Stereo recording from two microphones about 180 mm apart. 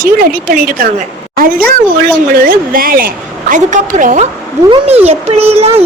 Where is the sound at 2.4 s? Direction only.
50° right (ahead or behind).